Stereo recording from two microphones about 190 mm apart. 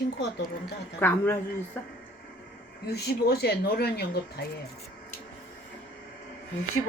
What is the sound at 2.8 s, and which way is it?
Speech, 55° left (ahead or behind).